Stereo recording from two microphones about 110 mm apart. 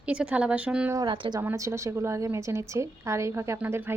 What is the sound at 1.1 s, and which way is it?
Speech, 45° right (ahead or behind).